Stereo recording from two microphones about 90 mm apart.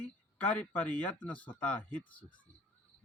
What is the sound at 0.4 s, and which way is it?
Speech, 15° left (ahead or behind).